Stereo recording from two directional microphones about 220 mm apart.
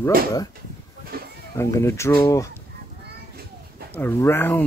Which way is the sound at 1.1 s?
45° right (ahead or behind).